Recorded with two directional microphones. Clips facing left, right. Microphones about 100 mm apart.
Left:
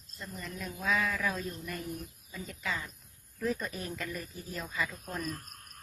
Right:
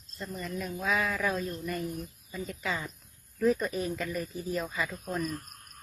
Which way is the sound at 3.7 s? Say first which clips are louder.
Right 6 dB; 5° right (ahead or behind).